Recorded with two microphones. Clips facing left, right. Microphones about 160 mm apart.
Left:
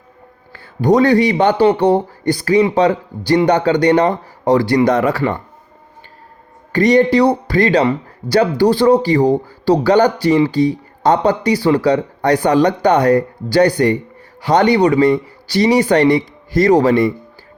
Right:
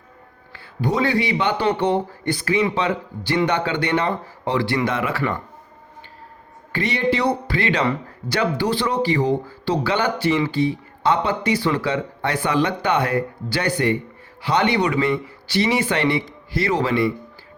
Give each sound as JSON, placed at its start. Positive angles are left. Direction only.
{"t": 0.5, "sound": "speech", "side_deg": 45}
{"t": 6.7, "sound": "speech", "side_deg": 40}